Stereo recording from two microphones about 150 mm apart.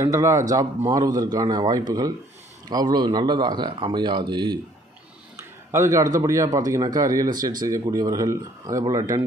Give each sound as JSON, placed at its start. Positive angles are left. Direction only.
{"t": 0.0, "sound": "speech", "side_deg": -20}
{"t": 5.7, "sound": "speech", "side_deg": -20}